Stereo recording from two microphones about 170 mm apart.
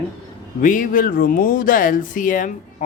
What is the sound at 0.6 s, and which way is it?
Speech, 50° left (ahead or behind).